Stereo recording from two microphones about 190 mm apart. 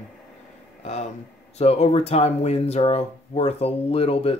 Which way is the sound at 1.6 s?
30° left (ahead or behind).